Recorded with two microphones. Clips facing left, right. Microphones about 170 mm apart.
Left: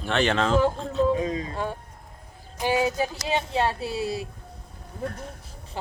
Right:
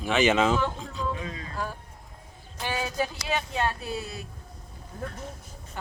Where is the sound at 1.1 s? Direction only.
35° left (ahead or behind).